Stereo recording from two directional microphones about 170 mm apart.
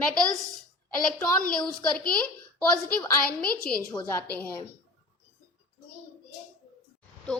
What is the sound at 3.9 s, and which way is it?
Speech, 10° left (ahead or behind).